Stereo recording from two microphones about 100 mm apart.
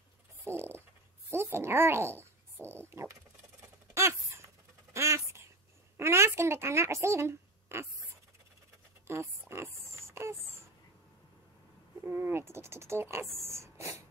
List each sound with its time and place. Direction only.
0.5 s a sound: 25° right (ahead or behind)
1.3 s speech: 25° right (ahead or behind)
2.8 s coin: 25° right (ahead or behind)
3.9 s a sound: 30° right (ahead or behind)
5.9 s a woman's voice: 25° right (ahead or behind)
9.0 s oink: 25° right (ahead or behind)
12.0 s speech: 20° right (ahead or behind)